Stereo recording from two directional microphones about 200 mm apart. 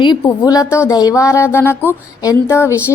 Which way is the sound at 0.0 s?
20° left (ahead or behind).